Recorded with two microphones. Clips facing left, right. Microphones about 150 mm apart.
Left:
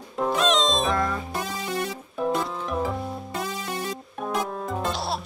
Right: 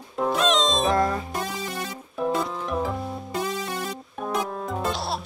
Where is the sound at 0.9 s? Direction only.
35° right (ahead or behind).